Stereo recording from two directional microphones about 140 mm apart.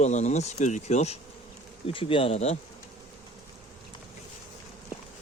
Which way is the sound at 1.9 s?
40° left (ahead or behind).